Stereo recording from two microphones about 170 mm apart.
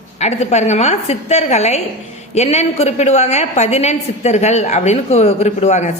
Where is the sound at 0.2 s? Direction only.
40° left (ahead or behind).